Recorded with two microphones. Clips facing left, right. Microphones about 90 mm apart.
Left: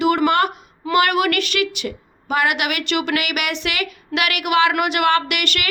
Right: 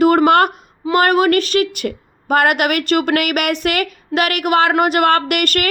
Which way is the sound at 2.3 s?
50° right (ahead or behind).